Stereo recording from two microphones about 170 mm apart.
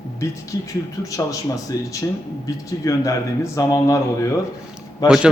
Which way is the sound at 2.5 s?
20° left (ahead or behind).